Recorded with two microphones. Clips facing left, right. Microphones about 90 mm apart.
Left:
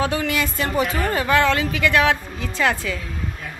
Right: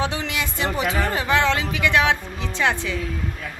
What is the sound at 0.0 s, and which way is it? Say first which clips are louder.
A woman's voice: left 4 dB; 20° right (ahead or behind).